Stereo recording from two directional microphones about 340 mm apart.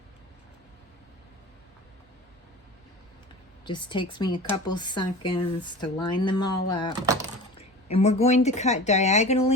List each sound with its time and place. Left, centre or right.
3.7 s speech: centre
7.0 s speech: centre
7.6 s speech: centre